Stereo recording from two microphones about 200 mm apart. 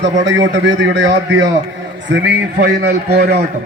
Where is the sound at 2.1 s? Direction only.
60° right (ahead or behind).